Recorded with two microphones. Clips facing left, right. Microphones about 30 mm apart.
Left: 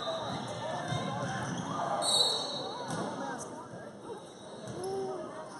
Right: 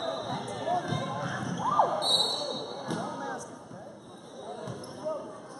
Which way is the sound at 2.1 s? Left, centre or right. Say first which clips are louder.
Right 1 dB; centre.